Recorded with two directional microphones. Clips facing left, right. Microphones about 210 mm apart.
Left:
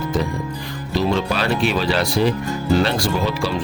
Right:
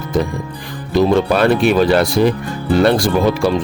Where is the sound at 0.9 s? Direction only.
50° right (ahead or behind).